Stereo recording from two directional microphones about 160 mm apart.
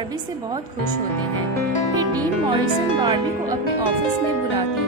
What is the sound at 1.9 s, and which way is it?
A woman's voice, 25° right (ahead or behind).